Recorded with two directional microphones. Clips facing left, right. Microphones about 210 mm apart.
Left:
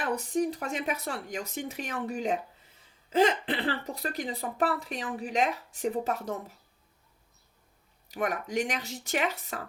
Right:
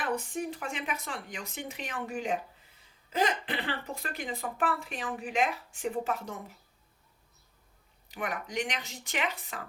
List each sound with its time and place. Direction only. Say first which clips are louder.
0.1 s speech: left 8 dB; 35° left (ahead or behind)
3.5 s speech: left 4 dB; 35° left (ahead or behind)
8.0 s speech: left 5 dB; 40° left (ahead or behind)